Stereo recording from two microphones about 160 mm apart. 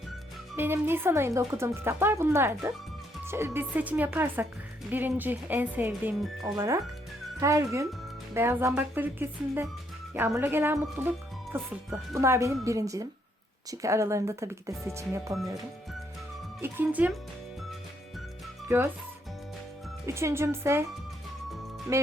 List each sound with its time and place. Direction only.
0.5 s speech: 15° right (ahead or behind)
16.6 s speech: 15° right (ahead or behind)
18.7 s speech: 15° right (ahead or behind)
20.1 s speech: 15° right (ahead or behind)